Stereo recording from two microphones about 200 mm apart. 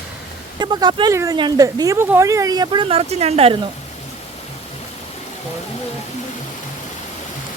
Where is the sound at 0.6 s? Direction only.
20° right (ahead or behind).